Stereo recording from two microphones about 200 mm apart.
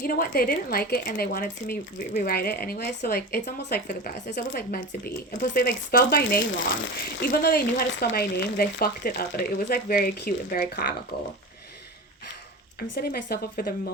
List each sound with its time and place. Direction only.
0.0 s speech: 45° left (ahead or behind)
12.9 s speech: 50° left (ahead or behind)